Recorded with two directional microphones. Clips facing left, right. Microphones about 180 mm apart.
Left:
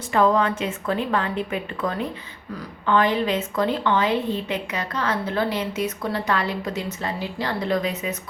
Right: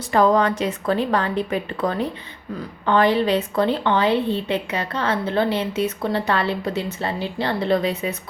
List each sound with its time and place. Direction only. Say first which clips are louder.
0.1 s a woman's voice: right 2 dB; 35° right (ahead or behind)